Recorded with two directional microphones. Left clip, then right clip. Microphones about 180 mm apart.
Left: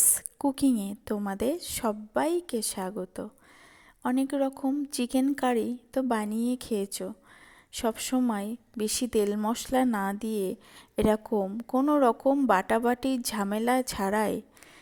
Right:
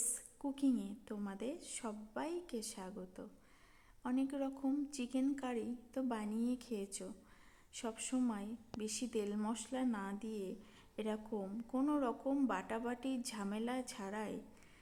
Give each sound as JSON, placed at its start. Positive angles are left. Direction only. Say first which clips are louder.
{"t": 0.0, "sound": "a woman's voice", "louder": "left 16 dB", "side_deg": 45}